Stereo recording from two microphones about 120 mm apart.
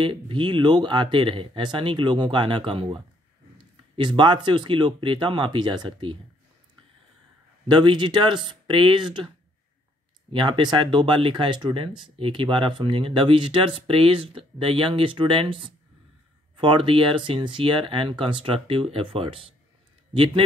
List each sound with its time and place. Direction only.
0.0 s speech: 45° right (ahead or behind)
7.6 s speech: 40° right (ahead or behind)
10.3 s speech: 40° right (ahead or behind)